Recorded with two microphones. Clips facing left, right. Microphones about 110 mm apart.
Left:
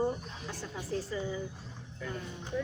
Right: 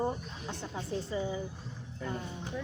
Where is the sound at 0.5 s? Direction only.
20° right (ahead or behind).